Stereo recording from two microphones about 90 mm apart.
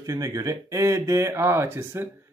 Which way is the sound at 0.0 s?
40° right (ahead or behind).